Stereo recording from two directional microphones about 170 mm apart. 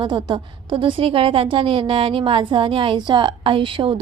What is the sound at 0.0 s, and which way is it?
A woman's voice, 25° right (ahead or behind).